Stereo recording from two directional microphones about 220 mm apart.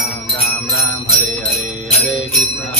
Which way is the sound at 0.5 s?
15° left (ahead or behind).